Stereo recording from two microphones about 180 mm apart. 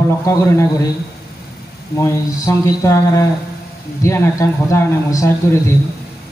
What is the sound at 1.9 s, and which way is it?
Speech, 15° left (ahead or behind).